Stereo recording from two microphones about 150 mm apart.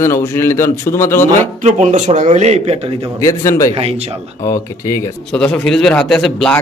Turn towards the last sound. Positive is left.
turn(degrees=5)  # may be behind; listen again after turning